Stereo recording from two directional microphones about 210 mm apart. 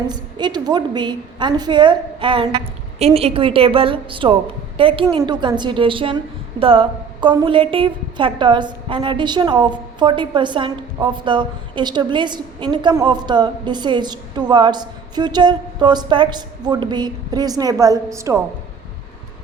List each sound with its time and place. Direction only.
0.1 s a woman's voice: 20° right (ahead or behind)